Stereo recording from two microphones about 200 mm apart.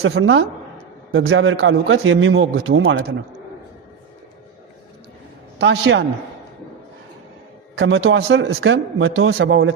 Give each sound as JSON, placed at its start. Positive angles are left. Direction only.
{"t": 0.0, "sound": "a woman's voice", "side_deg": -90}
{"t": 5.5, "sound": "a man's voice", "side_deg": -60}
{"t": 7.8, "sound": "speech", "side_deg": -70}